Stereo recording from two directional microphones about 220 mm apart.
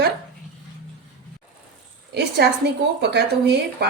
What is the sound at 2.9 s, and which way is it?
Speech, 50° right (ahead or behind).